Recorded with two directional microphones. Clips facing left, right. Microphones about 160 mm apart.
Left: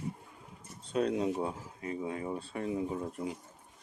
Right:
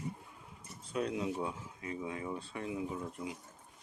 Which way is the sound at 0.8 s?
35° left (ahead or behind).